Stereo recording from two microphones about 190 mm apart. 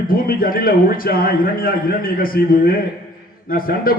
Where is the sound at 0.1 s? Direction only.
50° left (ahead or behind).